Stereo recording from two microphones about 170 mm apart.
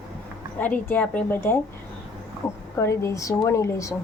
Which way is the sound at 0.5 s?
10° left (ahead or behind).